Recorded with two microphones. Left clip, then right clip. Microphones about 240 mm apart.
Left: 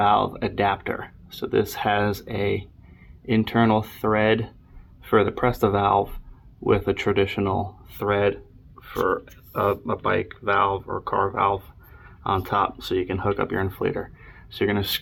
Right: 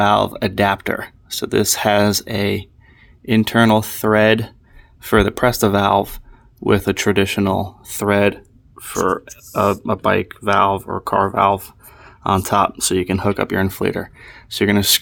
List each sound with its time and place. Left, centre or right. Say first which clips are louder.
0.0 s speech: right 5 dB; right